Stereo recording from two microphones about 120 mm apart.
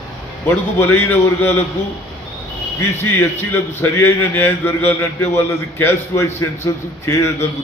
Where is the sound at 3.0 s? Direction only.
20° left (ahead or behind).